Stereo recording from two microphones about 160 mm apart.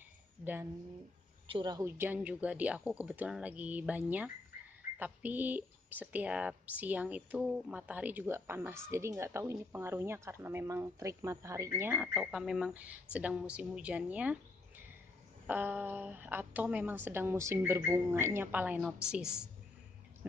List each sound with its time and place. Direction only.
1.5 s a woman's voice: 25° right (ahead or behind)
1.9 s speech: 10° right (ahead or behind)
15.4 s a woman's voice: 10° right (ahead or behind)